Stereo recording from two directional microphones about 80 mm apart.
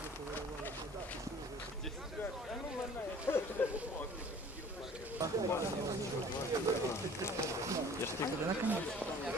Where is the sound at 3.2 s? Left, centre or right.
Left.